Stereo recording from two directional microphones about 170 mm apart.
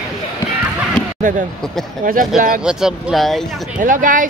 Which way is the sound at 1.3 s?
50° right (ahead or behind).